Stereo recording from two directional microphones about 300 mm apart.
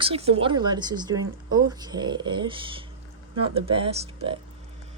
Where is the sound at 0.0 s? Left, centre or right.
Centre.